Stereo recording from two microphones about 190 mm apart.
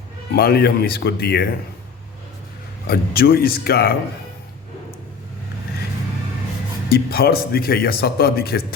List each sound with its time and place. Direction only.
0.3 s speech: 55° left (ahead or behind)
2.8 s speech: 50° left (ahead or behind)
6.9 s speech: 50° left (ahead or behind)